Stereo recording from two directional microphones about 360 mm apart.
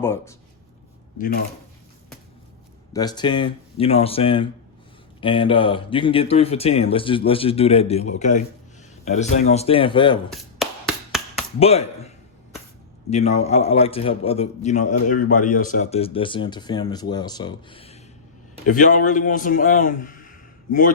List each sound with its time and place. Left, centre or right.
0.0 s a man's voice: centre
2.9 s a man's voice: centre
11.6 s a man's voice: centre